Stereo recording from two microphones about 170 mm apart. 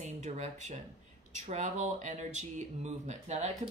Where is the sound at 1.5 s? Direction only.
45° right (ahead or behind).